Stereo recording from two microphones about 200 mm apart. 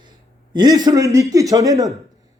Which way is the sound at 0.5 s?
20° right (ahead or behind).